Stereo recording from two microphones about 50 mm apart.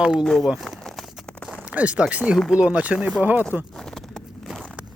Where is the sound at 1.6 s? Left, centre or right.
Right.